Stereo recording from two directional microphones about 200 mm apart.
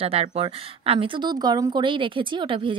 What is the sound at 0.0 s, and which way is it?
Speech, 30° right (ahead or behind).